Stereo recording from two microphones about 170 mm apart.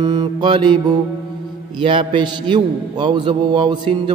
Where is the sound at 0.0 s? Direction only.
25° right (ahead or behind).